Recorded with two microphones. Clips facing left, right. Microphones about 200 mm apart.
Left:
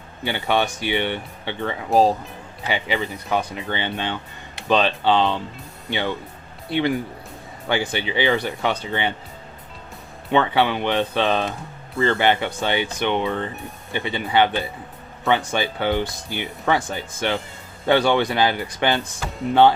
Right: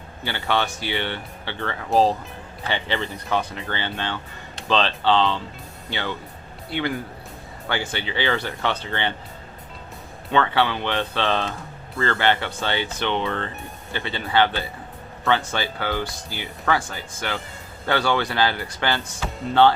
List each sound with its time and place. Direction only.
0.3 s speech: 15° left (ahead or behind)
10.3 s speech: 15° left (ahead or behind)